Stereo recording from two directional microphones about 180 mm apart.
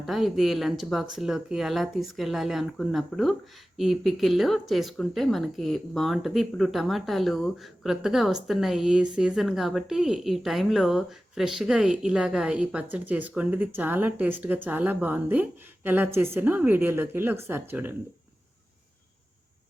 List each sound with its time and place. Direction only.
0.0 s speech: centre (ahead or behind)